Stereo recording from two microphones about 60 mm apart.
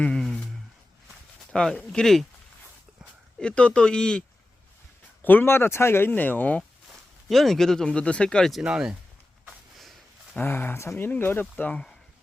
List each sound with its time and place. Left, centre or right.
1.5 s speech: centre
3.4 s speech: centre
5.2 s speech: left
7.3 s speech: centre
8.6 s speech: centre
9.7 s a sound: centre
10.3 s speech: left